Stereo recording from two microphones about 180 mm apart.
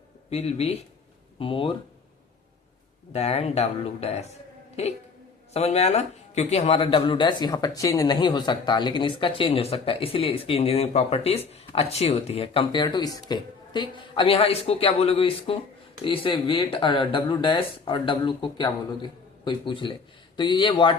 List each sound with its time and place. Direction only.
0.3 s speech: 35° left (ahead or behind)
3.1 s speech: 35° left (ahead or behind)
5.5 s speech: 35° left (ahead or behind)